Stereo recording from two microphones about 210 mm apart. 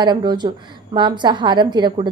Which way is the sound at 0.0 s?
20° right (ahead or behind).